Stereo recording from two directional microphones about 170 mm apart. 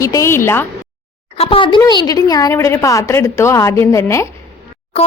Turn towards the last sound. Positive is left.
turn(degrees=35)  # may be behind; listen again after turning